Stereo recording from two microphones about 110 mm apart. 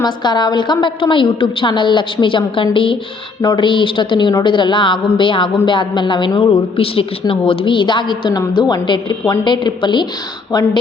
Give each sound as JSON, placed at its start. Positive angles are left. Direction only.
{"t": 0.0, "sound": "a woman's voice", "side_deg": 40}